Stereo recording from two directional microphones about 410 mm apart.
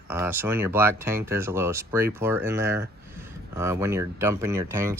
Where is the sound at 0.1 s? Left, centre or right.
Centre.